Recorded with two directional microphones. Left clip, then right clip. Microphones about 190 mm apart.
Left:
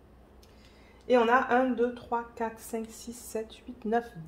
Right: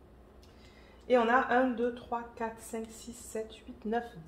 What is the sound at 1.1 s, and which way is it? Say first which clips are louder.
A woman's voice: left 3 dB; 55° left (ahead or behind).